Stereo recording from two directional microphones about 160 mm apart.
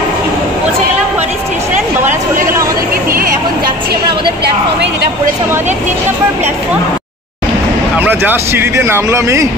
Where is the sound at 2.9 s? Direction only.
65° right (ahead or behind).